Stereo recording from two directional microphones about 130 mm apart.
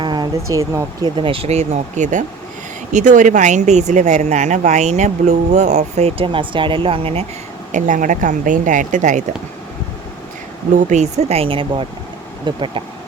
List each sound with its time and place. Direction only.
0.0 s speech: 35° right (ahead or behind)
1.1 s speech: 40° right (ahead or behind)
7.7 s speech: 75° right (ahead or behind)
10.8 s speech: 70° right (ahead or behind)
11.2 s speech: 50° right (ahead or behind)